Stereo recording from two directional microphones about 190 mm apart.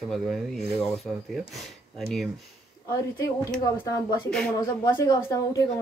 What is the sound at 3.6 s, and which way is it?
Speech, 15° left (ahead or behind).